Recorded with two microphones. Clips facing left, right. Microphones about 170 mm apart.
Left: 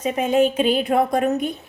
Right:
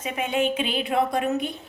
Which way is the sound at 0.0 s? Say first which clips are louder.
Left 7 dB; 40° left (ahead or behind).